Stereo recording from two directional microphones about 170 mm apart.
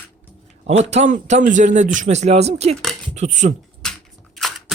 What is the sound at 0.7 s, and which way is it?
A man's voice, 40° right (ahead or behind).